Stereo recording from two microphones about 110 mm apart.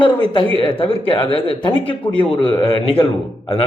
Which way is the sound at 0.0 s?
50° left (ahead or behind).